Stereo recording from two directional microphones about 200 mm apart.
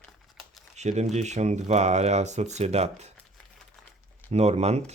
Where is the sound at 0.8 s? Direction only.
35° right (ahead or behind).